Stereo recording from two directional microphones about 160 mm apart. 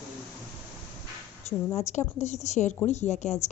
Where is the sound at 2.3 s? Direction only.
45° left (ahead or behind).